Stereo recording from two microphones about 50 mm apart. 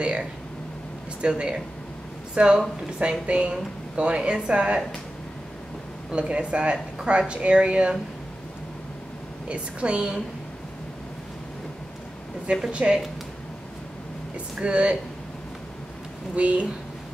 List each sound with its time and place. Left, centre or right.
0.0 s a sound: right
1.2 s speech: centre
6.1 s speech: right
9.5 s speech: right
12.4 s speech: right
14.6 s speech: right
16.3 s speech: right